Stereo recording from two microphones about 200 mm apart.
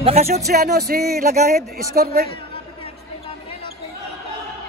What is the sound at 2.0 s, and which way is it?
Music, 50° right (ahead or behind).